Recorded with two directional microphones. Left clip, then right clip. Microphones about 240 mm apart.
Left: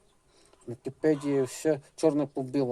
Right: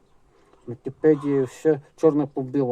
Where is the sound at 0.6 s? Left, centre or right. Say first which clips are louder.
Right 7 dB; centre.